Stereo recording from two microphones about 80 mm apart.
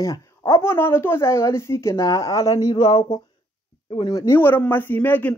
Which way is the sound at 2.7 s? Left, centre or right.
Left.